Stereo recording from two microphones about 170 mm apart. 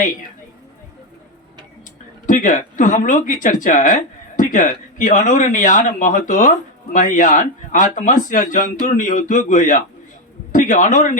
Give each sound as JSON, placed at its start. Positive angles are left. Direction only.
{"t": 2.2, "sound": "speech", "side_deg": 50}